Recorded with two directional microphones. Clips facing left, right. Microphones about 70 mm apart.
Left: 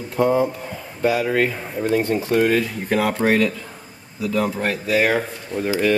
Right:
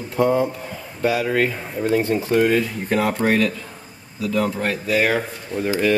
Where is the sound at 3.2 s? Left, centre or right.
Centre.